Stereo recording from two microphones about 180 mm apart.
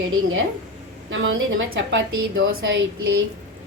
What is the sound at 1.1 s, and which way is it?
A woman's voice, 90° right.